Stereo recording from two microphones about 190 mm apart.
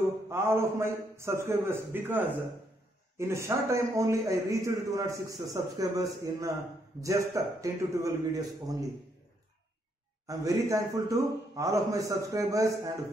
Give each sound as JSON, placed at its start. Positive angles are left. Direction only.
{"t": 0.3, "sound": "a man's voice", "side_deg": -15}
{"t": 10.2, "sound": "a man's voice", "side_deg": -15}